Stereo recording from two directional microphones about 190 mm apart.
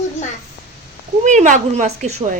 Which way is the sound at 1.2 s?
40° right (ahead or behind).